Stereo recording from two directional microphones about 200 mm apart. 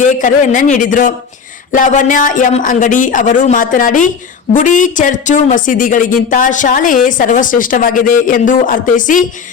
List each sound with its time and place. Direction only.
0.0 s speech: 40° left (ahead or behind)